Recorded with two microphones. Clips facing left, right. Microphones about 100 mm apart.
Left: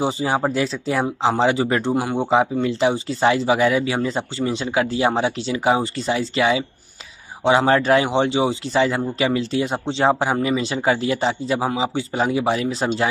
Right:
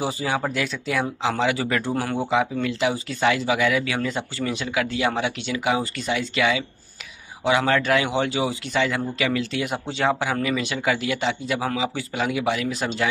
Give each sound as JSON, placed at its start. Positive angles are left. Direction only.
{"t": 0.0, "sound": "a man's voice", "side_deg": 30}